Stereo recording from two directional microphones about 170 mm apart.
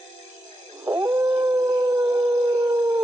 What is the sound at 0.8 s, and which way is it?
Howl, 15° right (ahead or behind).